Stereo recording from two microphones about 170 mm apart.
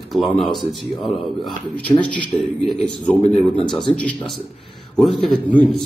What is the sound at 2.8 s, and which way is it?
Speech, 5° left (ahead or behind).